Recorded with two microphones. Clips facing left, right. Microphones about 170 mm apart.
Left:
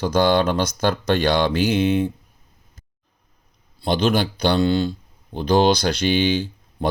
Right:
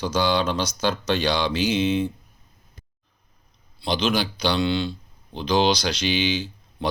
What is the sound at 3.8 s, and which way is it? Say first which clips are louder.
Speech: left 4 dB; 50° left (ahead or behind).